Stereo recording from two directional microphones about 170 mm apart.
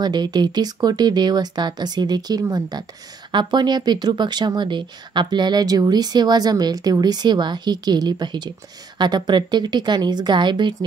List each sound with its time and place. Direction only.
0.0 s speech: 25° right (ahead or behind)